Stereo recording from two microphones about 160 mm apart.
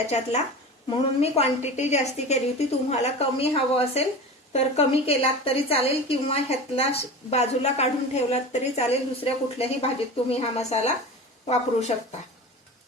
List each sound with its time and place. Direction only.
0.1 s a woman's voice: 45° left (ahead or behind)